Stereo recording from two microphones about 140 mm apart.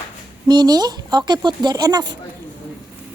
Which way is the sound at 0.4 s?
30° right (ahead or behind).